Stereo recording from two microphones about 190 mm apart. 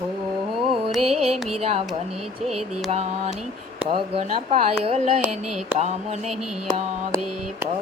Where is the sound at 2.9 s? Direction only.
35° right (ahead or behind).